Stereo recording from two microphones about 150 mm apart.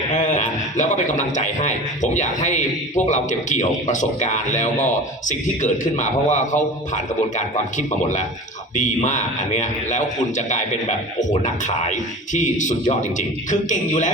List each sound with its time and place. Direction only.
0.2 s a man's voice: 55° left (ahead or behind)